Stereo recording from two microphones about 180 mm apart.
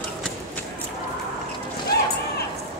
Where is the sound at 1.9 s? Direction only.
65° left (ahead or behind).